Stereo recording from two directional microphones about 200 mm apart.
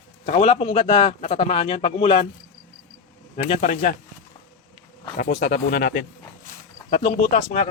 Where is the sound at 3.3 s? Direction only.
40° left (ahead or behind).